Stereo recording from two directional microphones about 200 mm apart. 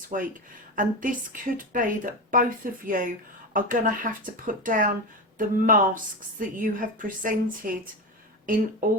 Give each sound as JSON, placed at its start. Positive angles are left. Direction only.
{"t": 0.1, "sound": "a woman's voice", "side_deg": -40}